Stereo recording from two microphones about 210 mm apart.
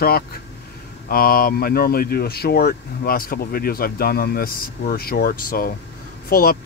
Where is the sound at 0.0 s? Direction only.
45° left (ahead or behind).